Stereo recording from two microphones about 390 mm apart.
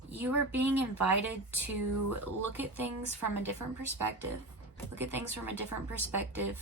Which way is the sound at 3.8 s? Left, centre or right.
Right.